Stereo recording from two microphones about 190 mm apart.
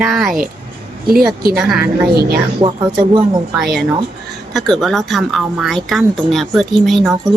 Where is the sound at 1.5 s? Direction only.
Centre (ahead or behind).